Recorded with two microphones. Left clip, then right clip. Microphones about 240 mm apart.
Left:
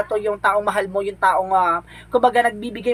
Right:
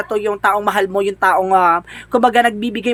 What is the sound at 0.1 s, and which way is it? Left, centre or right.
Speech, right.